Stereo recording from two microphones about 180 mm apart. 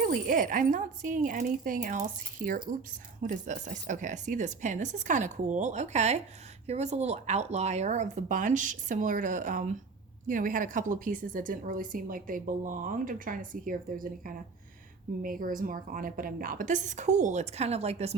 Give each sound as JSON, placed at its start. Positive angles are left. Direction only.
{"t": 0.0, "sound": "a woman's voice", "side_deg": -50}